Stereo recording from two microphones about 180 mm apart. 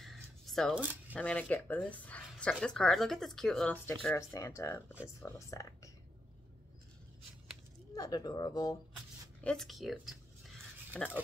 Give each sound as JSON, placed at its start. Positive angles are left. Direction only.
{"t": 0.0, "sound": "shuffling cards", "side_deg": 0}
{"t": 0.7, "sound": "speech", "side_deg": -10}
{"t": 1.1, "sound": "speech", "side_deg": 5}
{"t": 7.9, "sound": "speech", "side_deg": 20}
{"t": 9.4, "sound": "speech", "side_deg": 5}